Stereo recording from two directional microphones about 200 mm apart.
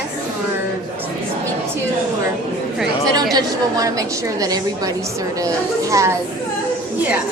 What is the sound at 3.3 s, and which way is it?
A woman's voice, 15° right (ahead or behind).